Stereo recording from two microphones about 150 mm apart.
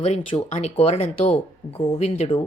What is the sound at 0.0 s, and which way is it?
Speech, 40° left (ahead or behind).